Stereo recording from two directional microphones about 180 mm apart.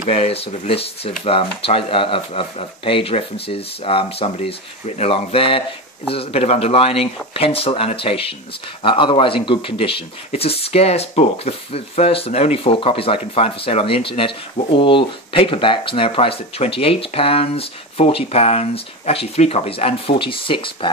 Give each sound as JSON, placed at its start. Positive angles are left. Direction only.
{"t": 0.0, "sound": "a man's voice", "side_deg": 35}